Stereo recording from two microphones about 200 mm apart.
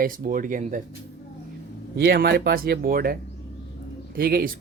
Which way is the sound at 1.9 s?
55° right (ahead or behind).